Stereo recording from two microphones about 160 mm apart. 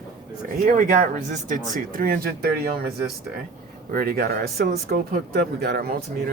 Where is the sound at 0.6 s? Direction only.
60° right (ahead or behind); by 2.7 s 75° right (ahead or behind).